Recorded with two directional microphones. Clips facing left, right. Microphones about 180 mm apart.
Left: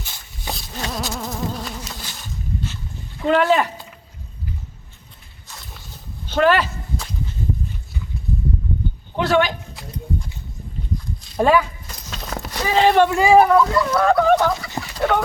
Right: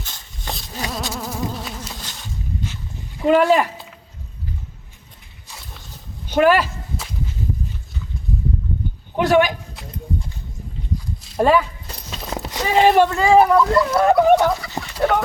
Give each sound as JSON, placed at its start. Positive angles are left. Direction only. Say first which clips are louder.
{"t": 0.0, "sound": "a sound", "louder": "left 1 dB", "side_deg": 5}
{"t": 0.9, "sound": "insect", "louder": "left 1 dB", "side_deg": -5}
{"t": 2.0, "sound": "a sound", "louder": "even", "side_deg": 10}
{"t": 3.2, "sound": "speech", "louder": "right 2 dB", "side_deg": -10}
{"t": 6.2, "sound": "whip", "louder": "right 2 dB", "side_deg": -10}
{"t": 9.1, "sound": "a man's voice", "louder": "right 3 dB", "side_deg": -15}
{"t": 10.9, "sound": "a sound", "louder": "right 1 dB", "side_deg": -5}
{"t": 12.1, "sound": "clip-clop", "louder": "right 2 dB", "side_deg": -10}
{"t": 12.4, "sound": "speech", "louder": "right 1 dB", "side_deg": -20}
{"t": 13.1, "sound": "speech", "louder": "left 1 dB", "side_deg": 10}
{"t": 13.4, "sound": "speech", "louder": "right 1 dB", "side_deg": 0}
{"t": 13.9, "sound": "speech", "louder": "even", "side_deg": -20}
{"t": 14.3, "sound": "chicken", "louder": "right 2 dB", "side_deg": 0}